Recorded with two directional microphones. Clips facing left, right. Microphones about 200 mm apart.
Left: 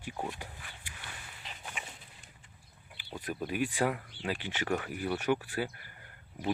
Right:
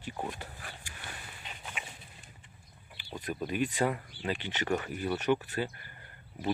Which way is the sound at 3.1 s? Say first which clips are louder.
Right 1 dB; 5° left (ahead or behind).